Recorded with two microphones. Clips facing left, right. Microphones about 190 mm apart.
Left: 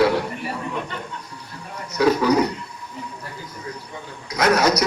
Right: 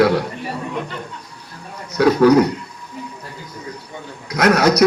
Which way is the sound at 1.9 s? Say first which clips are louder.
Right 6 dB; 60° right (ahead or behind).